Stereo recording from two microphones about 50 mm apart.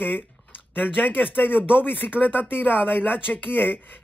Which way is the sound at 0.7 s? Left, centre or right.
Left.